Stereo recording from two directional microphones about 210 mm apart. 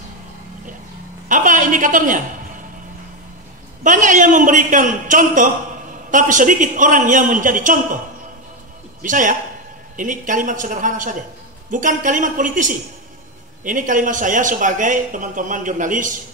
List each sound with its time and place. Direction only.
1.3 s a man's voice: 40° right (ahead or behind)
3.8 s a man's voice: 40° right (ahead or behind)
9.0 s a man's voice: 40° right (ahead or behind)